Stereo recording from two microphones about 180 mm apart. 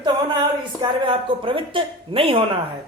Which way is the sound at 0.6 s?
30° right (ahead or behind).